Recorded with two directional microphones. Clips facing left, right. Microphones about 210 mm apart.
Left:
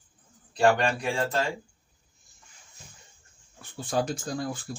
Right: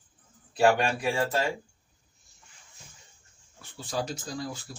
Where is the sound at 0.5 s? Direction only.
5° right (ahead or behind).